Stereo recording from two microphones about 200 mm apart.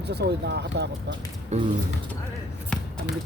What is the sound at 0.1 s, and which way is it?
Speech, 55° right (ahead or behind).